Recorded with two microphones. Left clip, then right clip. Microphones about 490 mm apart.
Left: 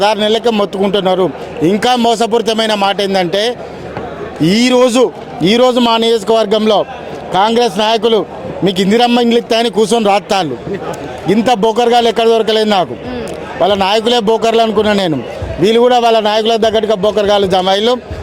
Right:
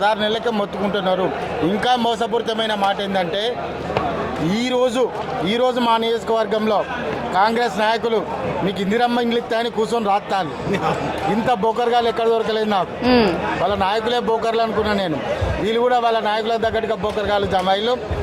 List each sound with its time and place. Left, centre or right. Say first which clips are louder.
0.0 s a man's voice: left 7 dB; left
4.5 s a man's voice: left 10 dB; left
11.4 s a man's voice: left 8 dB; left